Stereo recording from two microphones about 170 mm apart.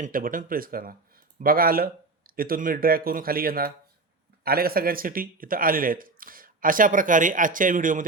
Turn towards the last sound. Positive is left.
turn(degrees=-50)  # may be behind; listen again after turning